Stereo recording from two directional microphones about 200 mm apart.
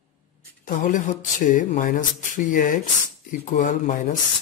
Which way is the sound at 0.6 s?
40° left (ahead or behind).